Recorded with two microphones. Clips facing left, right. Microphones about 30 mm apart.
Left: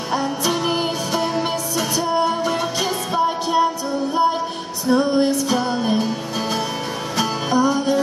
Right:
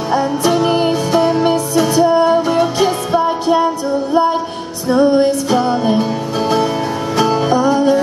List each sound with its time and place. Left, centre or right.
0.1 s music: centre
4.9 s music: centre
7.2 s music: centre